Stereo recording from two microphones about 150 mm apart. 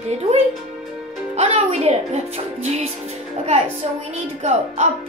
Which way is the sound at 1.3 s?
45° right (ahead or behind).